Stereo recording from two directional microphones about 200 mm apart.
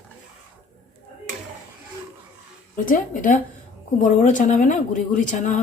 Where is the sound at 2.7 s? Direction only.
40° left (ahead or behind).